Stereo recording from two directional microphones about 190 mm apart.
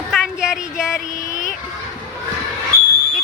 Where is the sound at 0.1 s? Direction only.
Centre (ahead or behind).